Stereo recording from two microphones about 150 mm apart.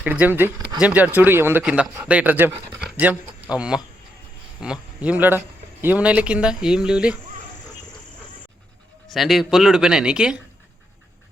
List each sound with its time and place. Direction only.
0.0 s speech: 10° right (ahead or behind)
9.1 s speech: centre (ahead or behind)